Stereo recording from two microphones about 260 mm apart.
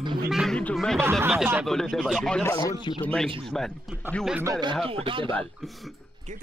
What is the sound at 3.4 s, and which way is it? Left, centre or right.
Speech, centre.